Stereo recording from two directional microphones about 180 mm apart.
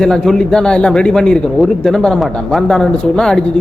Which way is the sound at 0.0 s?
5° left (ahead or behind).